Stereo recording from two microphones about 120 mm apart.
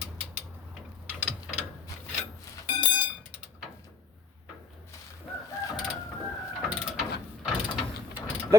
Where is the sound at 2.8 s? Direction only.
45° left (ahead or behind).